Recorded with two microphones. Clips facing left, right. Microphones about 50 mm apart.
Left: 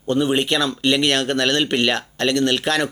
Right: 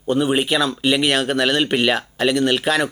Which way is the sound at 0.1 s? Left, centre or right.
Centre.